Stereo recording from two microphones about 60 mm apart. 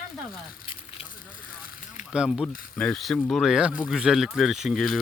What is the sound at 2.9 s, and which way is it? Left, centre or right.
Speech, centre.